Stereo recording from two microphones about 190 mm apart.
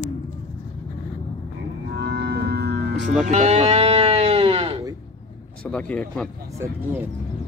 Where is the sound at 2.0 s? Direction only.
65° right (ahead or behind).